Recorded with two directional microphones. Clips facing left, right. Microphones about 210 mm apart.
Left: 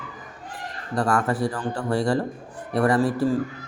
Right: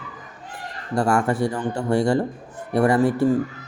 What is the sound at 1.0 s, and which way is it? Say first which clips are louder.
Speech: right 2 dB; 30° right (ahead or behind).